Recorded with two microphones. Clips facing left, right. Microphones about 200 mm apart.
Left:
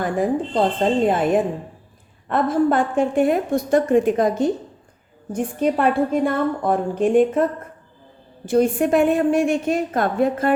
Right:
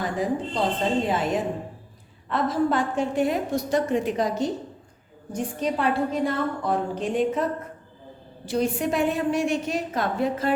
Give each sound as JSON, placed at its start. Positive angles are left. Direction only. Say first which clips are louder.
{"t": 0.0, "sound": "a woman's voice", "louder": "left 5 dB", "side_deg": 55}
{"t": 8.4, "sound": "a woman's voice", "louder": "left 7 dB", "side_deg": 50}